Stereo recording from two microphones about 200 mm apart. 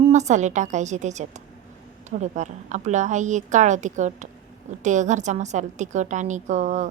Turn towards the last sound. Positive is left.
turn(degrees=-35)  # may be behind; listen again after turning